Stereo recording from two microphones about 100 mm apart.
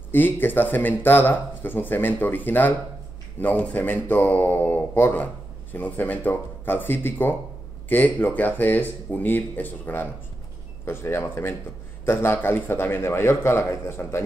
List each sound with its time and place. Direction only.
0.1 s speech: 20° left (ahead or behind)